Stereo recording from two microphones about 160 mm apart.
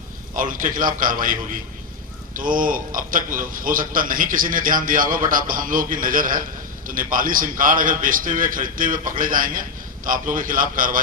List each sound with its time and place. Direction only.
0.3 s a man's voice: 55° right (ahead or behind)